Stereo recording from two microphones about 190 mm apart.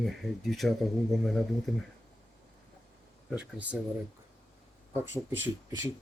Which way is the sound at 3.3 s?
5° right (ahead or behind).